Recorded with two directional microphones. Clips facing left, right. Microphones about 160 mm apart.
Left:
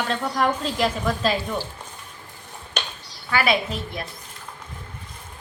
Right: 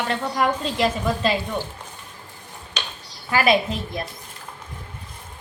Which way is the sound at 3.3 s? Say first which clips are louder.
Right 3 dB; 25° right (ahead or behind).